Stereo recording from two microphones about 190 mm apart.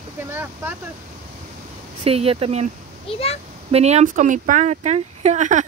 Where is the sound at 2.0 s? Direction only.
30° right (ahead or behind).